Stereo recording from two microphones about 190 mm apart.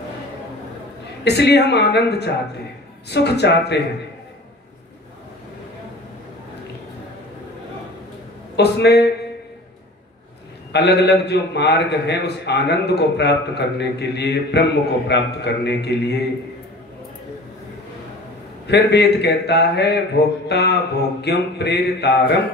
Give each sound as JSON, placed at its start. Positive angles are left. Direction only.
{"t": 1.2, "sound": "a man's voice", "side_deg": 60}
{"t": 8.5, "sound": "a man's voice", "side_deg": 60}
{"t": 10.7, "sound": "a man's voice", "side_deg": 60}
{"t": 18.7, "sound": "a man's voice", "side_deg": 60}